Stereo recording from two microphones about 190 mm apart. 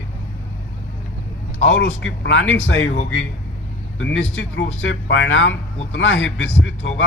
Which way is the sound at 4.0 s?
75° left (ahead or behind).